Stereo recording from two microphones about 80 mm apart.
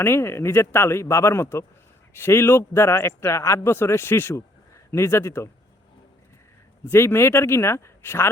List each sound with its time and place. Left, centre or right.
0.0 s speech: left
6.8 s speech: left